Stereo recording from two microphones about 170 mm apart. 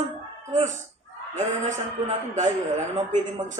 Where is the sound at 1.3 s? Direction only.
45° right (ahead or behind).